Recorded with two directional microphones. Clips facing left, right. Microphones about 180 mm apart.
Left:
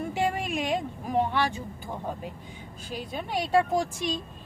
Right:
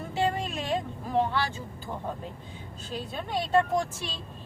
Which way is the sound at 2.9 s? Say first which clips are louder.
Left 1 dB; 10° left (ahead or behind).